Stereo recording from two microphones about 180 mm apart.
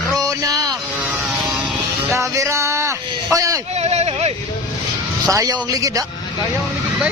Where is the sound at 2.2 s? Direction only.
15° right (ahead or behind).